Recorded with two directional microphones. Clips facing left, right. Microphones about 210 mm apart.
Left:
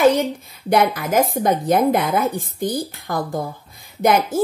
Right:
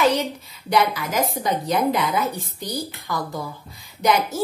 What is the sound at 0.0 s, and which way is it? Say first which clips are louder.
A woman's voice: left 5 dB; 50° left (ahead or behind).